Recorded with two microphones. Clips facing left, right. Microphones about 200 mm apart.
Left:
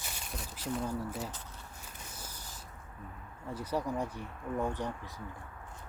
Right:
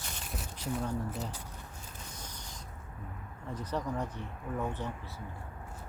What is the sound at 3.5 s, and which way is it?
Speech, 10° left (ahead or behind).